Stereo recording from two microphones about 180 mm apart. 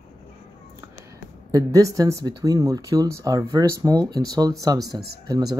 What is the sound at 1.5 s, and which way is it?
Speech, 20° right (ahead or behind).